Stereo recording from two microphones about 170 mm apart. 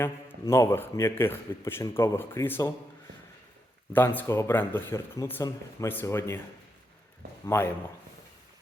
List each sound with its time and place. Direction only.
0.0 s speech: 15° left (ahead or behind)
3.9 s speech: 10° left (ahead or behind)
7.4 s speech: 15° left (ahead or behind)